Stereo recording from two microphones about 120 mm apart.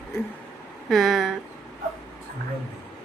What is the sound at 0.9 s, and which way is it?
Speech, centre (ahead or behind).